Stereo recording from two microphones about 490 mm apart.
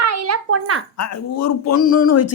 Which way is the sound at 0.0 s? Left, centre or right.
Right.